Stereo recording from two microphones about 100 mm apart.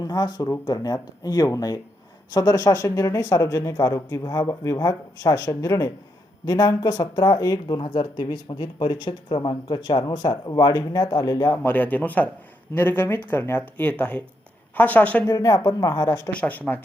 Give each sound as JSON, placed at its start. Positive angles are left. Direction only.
{"t": 0.0, "sound": "speech", "side_deg": 40}
{"t": 11.5, "sound": "a man's voice", "side_deg": 20}
{"t": 15.3, "sound": "speech", "side_deg": 35}
{"t": 16.3, "sound": "a man's voice", "side_deg": 15}